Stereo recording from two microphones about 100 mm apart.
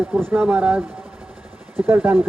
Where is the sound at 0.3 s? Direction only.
15° right (ahead or behind).